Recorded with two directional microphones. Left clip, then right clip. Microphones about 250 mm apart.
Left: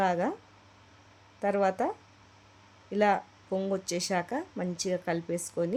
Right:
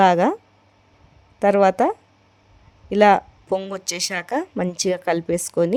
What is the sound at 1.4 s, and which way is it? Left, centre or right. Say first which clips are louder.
Speech: right 12 dB; right.